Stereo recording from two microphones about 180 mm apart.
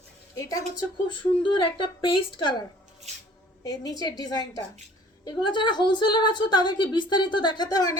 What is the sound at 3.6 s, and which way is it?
A woman's voice, 20° left (ahead or behind).